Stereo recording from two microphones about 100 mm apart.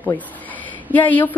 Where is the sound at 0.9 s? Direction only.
15° left (ahead or behind).